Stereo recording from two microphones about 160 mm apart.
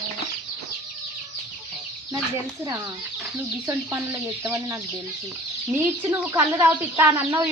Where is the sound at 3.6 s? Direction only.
15° right (ahead or behind).